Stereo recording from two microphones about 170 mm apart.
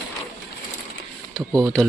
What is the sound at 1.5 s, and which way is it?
Speech, 20° right (ahead or behind).